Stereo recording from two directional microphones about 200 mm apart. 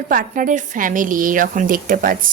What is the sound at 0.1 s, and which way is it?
A woman's voice, 40° right (ahead or behind).